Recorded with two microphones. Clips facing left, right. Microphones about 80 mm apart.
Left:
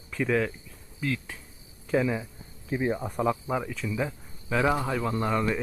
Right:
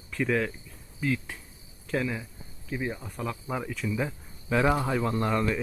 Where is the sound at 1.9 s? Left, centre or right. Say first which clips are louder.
Left 4 dB; centre.